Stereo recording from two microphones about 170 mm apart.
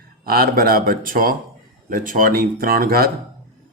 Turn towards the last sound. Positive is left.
turn(degrees=-60)  # may be behind; listen again after turning